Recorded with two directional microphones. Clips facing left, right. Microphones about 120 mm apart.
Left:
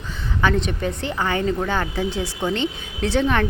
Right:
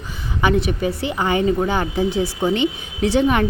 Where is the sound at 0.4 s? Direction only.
10° right (ahead or behind).